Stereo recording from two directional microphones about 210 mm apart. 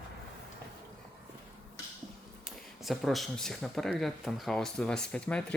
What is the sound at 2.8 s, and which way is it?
Speech, centre (ahead or behind).